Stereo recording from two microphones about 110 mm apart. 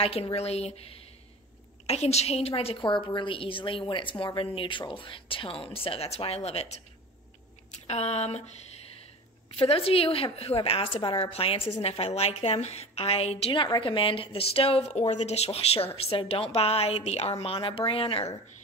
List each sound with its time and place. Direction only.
0.0 s a woman's voice: 60° left (ahead or behind)
7.8 s speech: 75° left (ahead or behind)
9.6 s a woman's voice: 60° left (ahead or behind)
11.8 s a woman's voice: 70° left (ahead or behind)
13.5 s a woman's voice: 45° left (ahead or behind)